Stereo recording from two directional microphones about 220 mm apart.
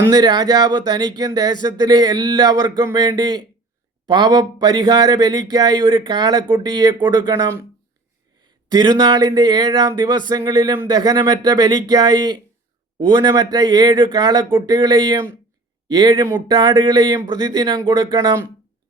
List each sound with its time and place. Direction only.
0.1 s speech: 20° right (ahead or behind)